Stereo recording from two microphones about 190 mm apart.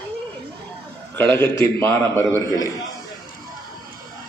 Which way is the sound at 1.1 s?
10° left (ahead or behind).